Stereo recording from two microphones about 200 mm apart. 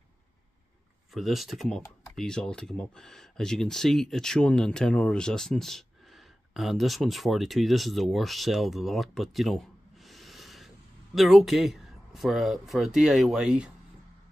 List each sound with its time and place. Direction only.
1.1 s speech: centre (ahead or behind)